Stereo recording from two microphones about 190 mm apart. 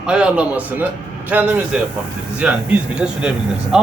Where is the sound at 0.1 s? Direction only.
5° right (ahead or behind).